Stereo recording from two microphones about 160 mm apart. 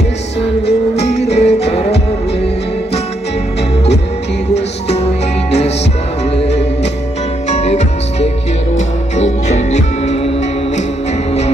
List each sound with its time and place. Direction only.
0.9 s music: 40° left (ahead or behind)
6.3 s music: 40° left (ahead or behind)